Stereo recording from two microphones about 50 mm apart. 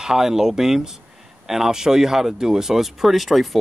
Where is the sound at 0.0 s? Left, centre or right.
Centre.